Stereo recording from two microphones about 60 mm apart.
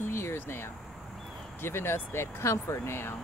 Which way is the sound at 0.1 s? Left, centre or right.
Left.